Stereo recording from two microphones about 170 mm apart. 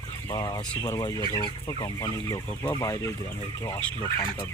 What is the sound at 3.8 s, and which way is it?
Speech, 5° left (ahead or behind).